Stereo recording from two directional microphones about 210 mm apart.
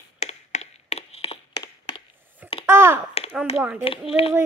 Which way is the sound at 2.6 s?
10° right (ahead or behind).